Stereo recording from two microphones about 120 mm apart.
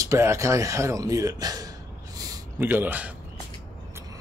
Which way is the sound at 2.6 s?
15° right (ahead or behind).